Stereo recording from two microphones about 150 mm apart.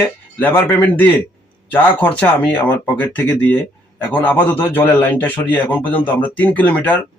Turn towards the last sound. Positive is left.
turn(degrees=10)  # may be behind; listen again after turning